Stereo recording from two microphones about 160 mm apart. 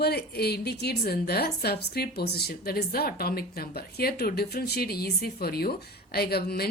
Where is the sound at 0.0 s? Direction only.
80° left.